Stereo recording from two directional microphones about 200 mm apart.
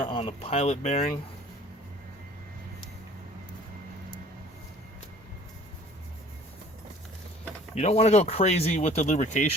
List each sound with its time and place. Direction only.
0.0 s speech: 25° left (ahead or behind)
7.8 s speech: 30° left (ahead or behind)